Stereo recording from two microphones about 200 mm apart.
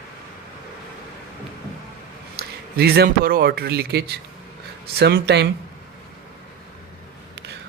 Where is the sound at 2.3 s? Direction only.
50° right (ahead or behind).